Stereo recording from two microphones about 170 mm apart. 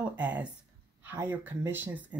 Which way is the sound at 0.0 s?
10° right (ahead or behind).